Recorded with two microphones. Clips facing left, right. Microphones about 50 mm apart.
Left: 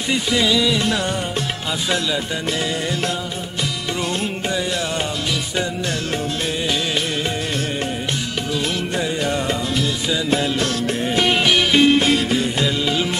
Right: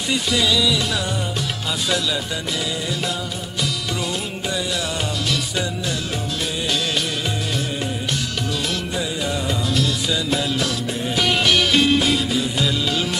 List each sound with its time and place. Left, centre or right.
0.1 s music: centre
8.9 s music: left; by 12.0 s centre
12.0 s music: left